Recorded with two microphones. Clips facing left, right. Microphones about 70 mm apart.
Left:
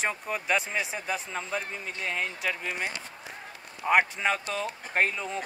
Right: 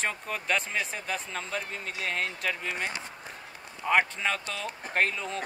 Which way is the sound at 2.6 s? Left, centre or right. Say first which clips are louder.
Even; centre.